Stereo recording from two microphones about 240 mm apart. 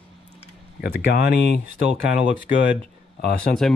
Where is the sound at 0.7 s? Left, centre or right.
Left.